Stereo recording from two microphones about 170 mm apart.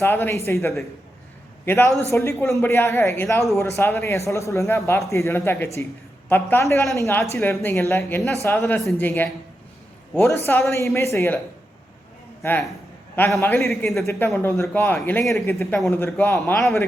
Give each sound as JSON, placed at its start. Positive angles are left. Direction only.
{"t": 0.0, "sound": "a man's voice", "side_deg": 15}
{"t": 12.4, "sound": "a man's voice", "side_deg": 10}
{"t": 13.7, "sound": "speech", "side_deg": 0}
{"t": 14.1, "sound": "a man's voice", "side_deg": 15}